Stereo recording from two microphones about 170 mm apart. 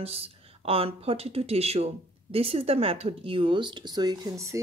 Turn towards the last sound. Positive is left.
turn(degrees=-15)  # may be behind; listen again after turning